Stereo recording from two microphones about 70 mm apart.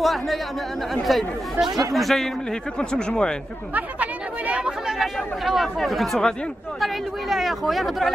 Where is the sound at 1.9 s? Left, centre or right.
Centre.